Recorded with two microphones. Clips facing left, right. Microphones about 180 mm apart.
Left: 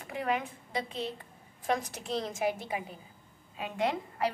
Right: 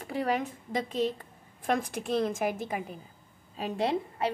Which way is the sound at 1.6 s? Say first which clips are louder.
Right 3 dB; 55° right (ahead or behind).